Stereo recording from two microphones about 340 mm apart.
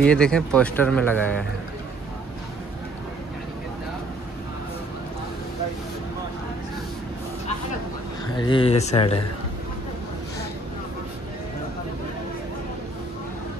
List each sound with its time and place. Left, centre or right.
0.0 s speech: centre
8.4 s speech: centre